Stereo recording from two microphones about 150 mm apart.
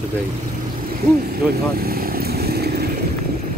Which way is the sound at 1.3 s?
90° right.